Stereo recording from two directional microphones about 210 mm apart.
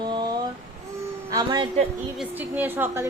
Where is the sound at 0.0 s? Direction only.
20° right (ahead or behind).